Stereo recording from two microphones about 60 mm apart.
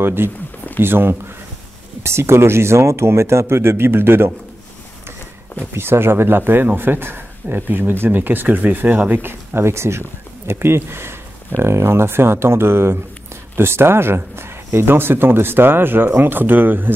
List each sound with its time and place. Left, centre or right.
0.0 s speech: right
5.8 s speech: right